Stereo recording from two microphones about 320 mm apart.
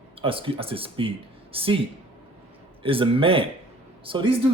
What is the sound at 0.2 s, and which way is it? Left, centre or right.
A man's voice, centre.